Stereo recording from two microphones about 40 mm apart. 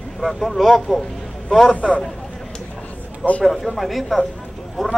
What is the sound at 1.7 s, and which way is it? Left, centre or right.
Speech, left.